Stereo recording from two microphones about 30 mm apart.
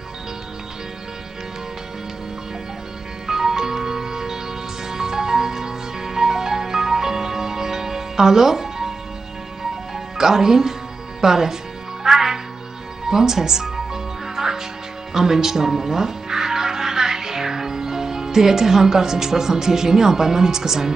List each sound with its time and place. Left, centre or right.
3.3 s music: centre
9.9 s music: centre
11.1 s speech: centre
12.0 s music: centre
13.1 s speech: centre
14.2 s music: centre
15.1 s speech: centre